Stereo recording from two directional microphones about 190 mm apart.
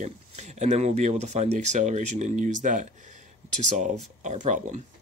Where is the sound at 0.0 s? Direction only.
35° right (ahead or behind).